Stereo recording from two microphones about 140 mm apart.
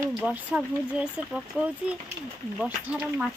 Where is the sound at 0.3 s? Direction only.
10° right (ahead or behind).